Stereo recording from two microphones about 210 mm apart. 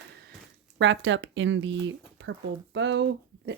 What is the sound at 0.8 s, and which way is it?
Speech, 60° right (ahead or behind).